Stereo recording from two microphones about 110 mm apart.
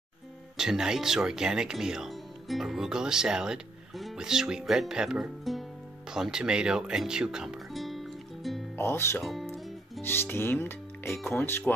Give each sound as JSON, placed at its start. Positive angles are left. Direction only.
{"t": 0.6, "sound": "speech", "side_deg": -5}
{"t": 8.7, "sound": "speech", "side_deg": 25}
{"t": 9.2, "sound": "guitar", "side_deg": 0}
{"t": 10.0, "sound": "speech", "side_deg": 20}